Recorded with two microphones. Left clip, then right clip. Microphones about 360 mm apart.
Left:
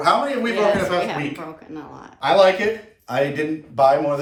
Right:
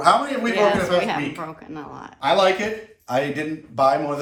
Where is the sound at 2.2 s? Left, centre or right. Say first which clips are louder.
Left 3 dB; centre.